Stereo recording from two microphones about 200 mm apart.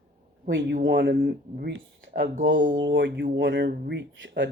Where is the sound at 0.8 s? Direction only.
55° right (ahead or behind).